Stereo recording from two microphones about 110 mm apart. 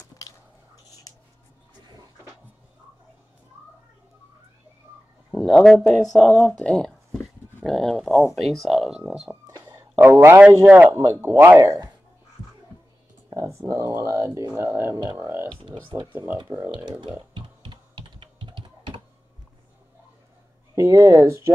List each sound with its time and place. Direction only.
0.2 s a sound: 35° left (ahead or behind)
1.1 s music: 30° left (ahead or behind)
5.3 s speech: 5° left (ahead or behind)
7.2 s dog: 5° left (ahead or behind)
8.4 s speech: centre (ahead or behind)
9.3 s a sound: 20° right (ahead or behind)
10.9 s a man's voice: 30° right (ahead or behind)
11.1 s speech: 20° right (ahead or behind)
13.3 s a sound: 25° right (ahead or behind)
15.5 s music: 50° right (ahead or behind)
16.1 s speech: 15° right (ahead or behind)
17.3 s computer keyboard: 45° right (ahead or behind)
20.7 s speech: 30° right (ahead or behind)